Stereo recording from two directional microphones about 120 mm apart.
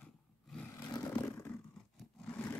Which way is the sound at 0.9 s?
30° left (ahead or behind).